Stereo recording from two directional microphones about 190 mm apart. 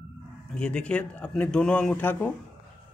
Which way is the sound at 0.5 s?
5° left (ahead or behind).